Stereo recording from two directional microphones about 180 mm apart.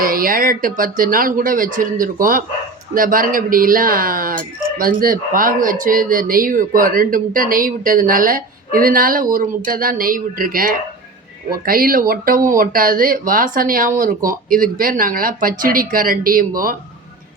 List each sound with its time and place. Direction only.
0.0 s speech: 50° right (ahead or behind)